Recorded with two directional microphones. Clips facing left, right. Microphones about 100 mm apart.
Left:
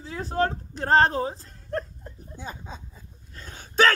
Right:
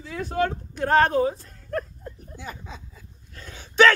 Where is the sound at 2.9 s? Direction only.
35° left (ahead or behind).